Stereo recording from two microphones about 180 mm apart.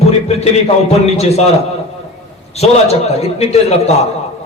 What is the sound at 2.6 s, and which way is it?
A man's voice, 35° left (ahead or behind).